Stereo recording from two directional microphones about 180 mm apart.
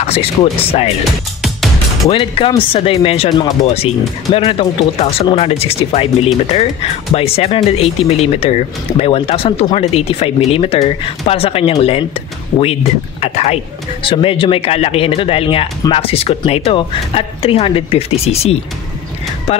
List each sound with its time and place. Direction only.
0.0 s speech: 35° left (ahead or behind)
2.0 s speech: 30° left (ahead or behind)
13.2 s a sound: 35° left (ahead or behind)
14.0 s speech: 30° left (ahead or behind)